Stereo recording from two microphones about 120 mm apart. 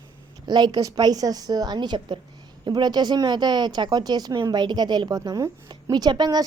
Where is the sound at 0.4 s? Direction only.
35° right (ahead or behind).